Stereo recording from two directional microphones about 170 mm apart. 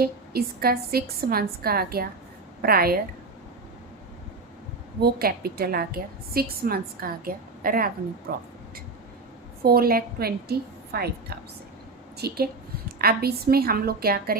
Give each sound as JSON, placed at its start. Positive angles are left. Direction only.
{"t": 0.0, "sound": "a woman's voice", "side_deg": -65}
{"t": 4.9, "sound": "a woman's voice", "side_deg": -65}
{"t": 9.6, "sound": "a woman's voice", "side_deg": -60}
{"t": 12.1, "sound": "a woman's voice", "side_deg": -70}